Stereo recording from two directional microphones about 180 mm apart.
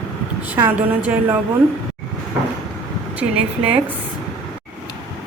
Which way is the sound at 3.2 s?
10° right (ahead or behind).